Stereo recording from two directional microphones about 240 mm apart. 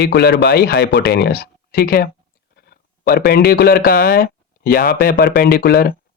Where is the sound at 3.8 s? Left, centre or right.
Left.